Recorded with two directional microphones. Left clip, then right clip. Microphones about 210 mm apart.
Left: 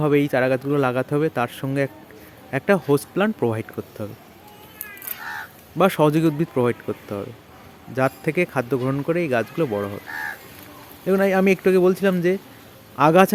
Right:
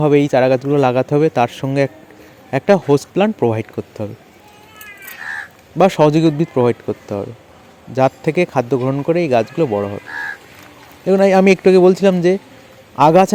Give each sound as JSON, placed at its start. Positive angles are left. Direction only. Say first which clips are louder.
{"t": 0.0, "sound": "speech", "louder": "right 7 dB", "side_deg": -20}
{"t": 5.7, "sound": "speech", "louder": "right 6 dB", "side_deg": -15}
{"t": 11.0, "sound": "speech", "louder": "right 7 dB", "side_deg": -15}